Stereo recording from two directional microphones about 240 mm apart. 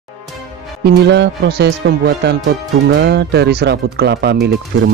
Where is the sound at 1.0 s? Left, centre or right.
Right.